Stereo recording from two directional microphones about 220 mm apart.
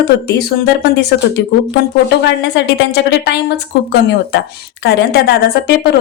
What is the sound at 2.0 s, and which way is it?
A woman's voice, 50° left (ahead or behind).